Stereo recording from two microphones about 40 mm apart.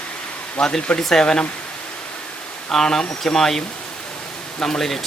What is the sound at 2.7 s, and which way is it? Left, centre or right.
Speech, centre.